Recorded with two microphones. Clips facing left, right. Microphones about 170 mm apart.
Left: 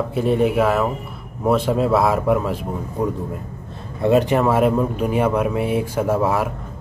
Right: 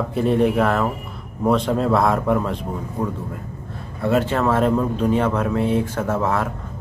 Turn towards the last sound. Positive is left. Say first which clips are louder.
# left 2 dB
turn(degrees=10)  # may be behind; listen again after turning